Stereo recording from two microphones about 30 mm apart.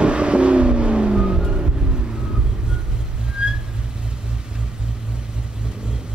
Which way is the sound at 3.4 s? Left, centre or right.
Right.